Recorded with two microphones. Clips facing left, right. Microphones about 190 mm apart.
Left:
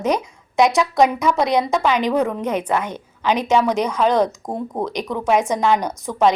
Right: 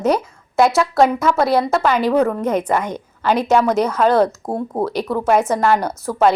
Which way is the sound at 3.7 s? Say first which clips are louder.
Right 3 dB; 10° left (ahead or behind).